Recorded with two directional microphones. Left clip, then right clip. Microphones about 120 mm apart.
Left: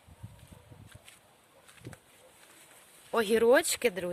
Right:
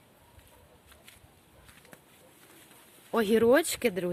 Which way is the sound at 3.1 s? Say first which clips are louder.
Right 1 dB; 15° left (ahead or behind).